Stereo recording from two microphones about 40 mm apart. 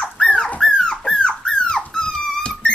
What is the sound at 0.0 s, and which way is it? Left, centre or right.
Dog, left.